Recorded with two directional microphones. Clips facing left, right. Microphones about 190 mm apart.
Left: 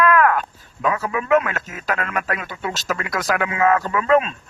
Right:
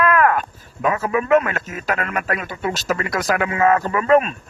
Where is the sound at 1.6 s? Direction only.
45° right (ahead or behind).